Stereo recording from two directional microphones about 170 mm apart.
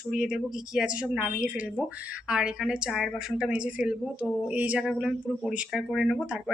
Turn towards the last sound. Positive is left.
turn(degrees=0)  # may be behind; listen again after turning